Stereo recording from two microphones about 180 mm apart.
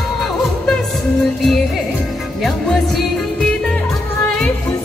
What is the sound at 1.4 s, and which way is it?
Music, centre (ahead or behind).